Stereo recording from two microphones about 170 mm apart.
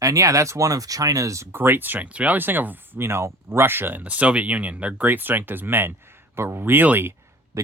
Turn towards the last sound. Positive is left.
turn(degrees=-15)  # may be behind; listen again after turning